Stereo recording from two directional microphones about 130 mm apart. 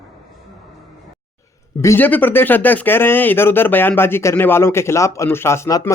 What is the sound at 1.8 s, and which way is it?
Speech, 20° left (ahead or behind).